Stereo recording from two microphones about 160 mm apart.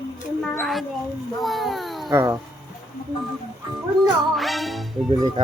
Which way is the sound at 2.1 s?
30° right (ahead or behind).